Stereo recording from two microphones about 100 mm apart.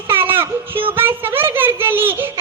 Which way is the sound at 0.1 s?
20° right (ahead or behind).